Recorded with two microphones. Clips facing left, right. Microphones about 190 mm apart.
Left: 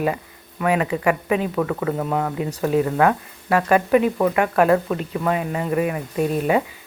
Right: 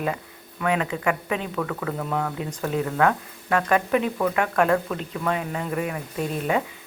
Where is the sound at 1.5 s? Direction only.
20° left (ahead or behind).